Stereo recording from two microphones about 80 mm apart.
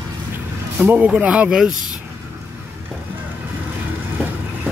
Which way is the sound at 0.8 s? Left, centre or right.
Centre.